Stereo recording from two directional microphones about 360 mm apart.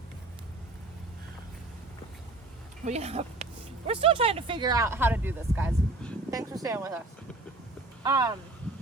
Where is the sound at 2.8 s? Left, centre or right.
Centre.